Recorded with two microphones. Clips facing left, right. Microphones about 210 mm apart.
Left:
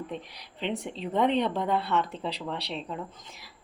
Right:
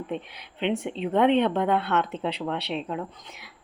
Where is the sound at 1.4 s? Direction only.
65° right (ahead or behind).